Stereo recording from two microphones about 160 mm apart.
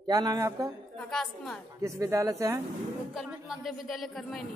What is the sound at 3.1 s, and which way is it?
Speech, 5° right (ahead or behind).